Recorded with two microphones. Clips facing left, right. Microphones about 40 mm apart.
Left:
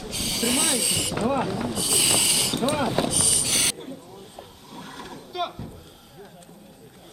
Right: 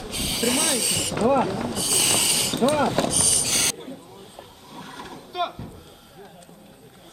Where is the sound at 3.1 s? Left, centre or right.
Centre.